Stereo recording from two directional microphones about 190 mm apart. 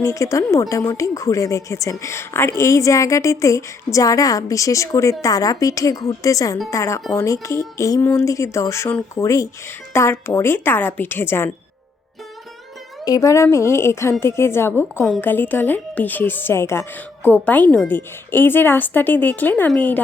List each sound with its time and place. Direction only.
0.0 s speech: 15° left (ahead or behind)
7.0 s speech: 5° left (ahead or behind)
7.4 s speech: 15° left (ahead or behind)
13.1 s speech: 15° left (ahead or behind)